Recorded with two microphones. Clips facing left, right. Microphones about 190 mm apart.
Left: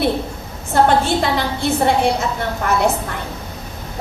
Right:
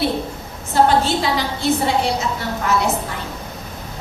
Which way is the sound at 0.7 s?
55° left (ahead or behind).